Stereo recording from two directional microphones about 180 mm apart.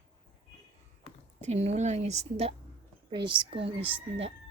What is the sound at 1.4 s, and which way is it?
Speech, 40° right (ahead or behind).